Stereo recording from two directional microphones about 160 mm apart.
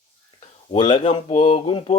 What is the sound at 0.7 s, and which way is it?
Speech, 35° left (ahead or behind).